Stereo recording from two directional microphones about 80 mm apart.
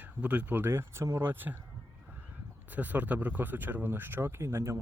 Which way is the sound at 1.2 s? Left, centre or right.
Right.